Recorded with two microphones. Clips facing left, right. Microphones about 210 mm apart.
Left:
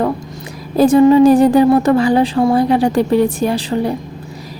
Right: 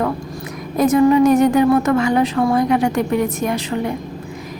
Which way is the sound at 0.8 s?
30° left (ahead or behind).